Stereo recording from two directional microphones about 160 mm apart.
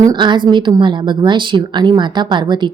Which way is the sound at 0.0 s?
25° right (ahead or behind).